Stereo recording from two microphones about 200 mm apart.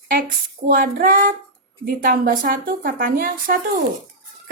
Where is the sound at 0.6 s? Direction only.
45° right (ahead or behind).